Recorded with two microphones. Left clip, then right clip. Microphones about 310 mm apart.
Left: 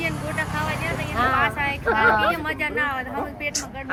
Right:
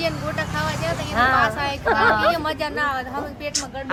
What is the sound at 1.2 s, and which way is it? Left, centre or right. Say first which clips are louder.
Speech: right 3 dB; right.